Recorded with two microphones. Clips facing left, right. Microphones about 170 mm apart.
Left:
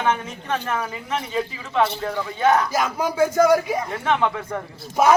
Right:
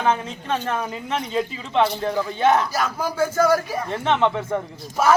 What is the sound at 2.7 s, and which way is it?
Speech, 10° left (ahead or behind).